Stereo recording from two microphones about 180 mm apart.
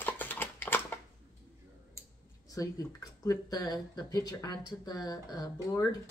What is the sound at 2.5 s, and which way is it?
Speech, 20° left (ahead or behind).